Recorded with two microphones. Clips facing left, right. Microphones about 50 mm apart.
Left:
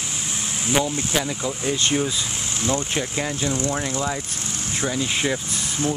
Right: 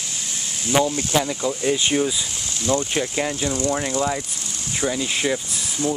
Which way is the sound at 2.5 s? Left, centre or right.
Left.